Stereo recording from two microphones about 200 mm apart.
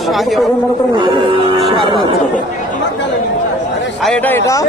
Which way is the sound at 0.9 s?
20° right (ahead or behind).